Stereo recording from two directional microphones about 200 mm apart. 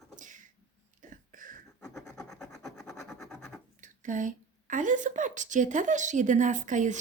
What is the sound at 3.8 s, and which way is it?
Speech, 40° right (ahead or behind).